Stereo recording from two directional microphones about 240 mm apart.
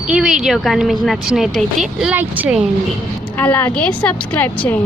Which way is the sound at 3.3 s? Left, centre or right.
Centre.